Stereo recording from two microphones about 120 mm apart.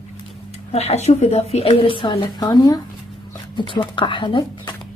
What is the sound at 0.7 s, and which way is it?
A woman's voice, 60° left (ahead or behind).